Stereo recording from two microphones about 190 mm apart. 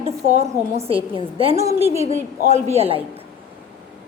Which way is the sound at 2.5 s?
35° right (ahead or behind).